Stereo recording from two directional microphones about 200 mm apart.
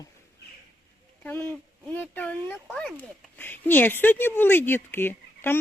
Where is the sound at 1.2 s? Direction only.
10° left (ahead or behind).